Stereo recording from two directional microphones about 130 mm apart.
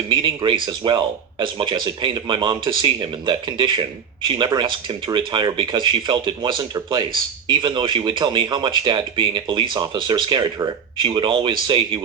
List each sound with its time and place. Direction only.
0.1 s speech: 40° right (ahead or behind)